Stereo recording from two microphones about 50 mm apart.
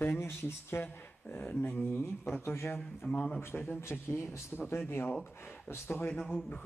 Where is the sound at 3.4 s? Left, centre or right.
Left.